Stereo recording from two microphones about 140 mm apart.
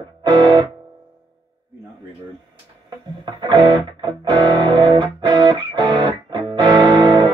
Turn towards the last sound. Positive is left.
turn(degrees=-35)  # may be behind; listen again after turning